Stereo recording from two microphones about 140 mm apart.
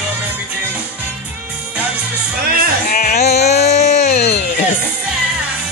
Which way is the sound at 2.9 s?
80° left.